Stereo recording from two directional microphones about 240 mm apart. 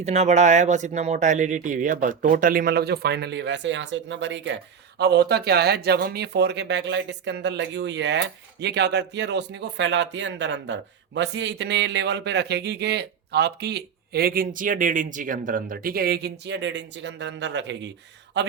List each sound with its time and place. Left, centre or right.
0.0 s speech: right